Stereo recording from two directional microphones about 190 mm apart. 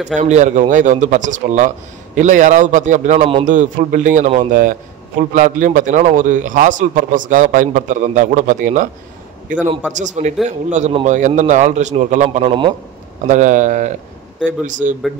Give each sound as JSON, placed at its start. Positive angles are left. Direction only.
{"t": 0.1, "sound": "speech", "side_deg": -40}
{"t": 3.4, "sound": "a man's voice", "side_deg": -40}
{"t": 9.9, "sound": "speech", "side_deg": -40}
{"t": 12.4, "sound": "a man's voice", "side_deg": -25}
{"t": 13.3, "sound": "speech", "side_deg": -40}